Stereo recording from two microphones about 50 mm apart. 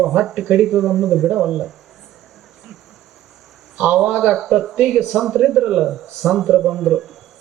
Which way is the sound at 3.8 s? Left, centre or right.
Centre.